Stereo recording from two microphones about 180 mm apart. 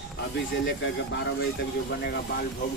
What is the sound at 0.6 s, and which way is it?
Speech, 80° left.